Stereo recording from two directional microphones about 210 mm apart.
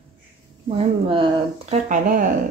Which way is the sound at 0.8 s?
25° right (ahead or behind).